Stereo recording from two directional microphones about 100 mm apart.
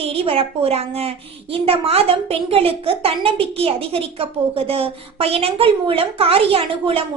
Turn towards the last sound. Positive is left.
turn(degrees=-70)  # may be behind; listen again after turning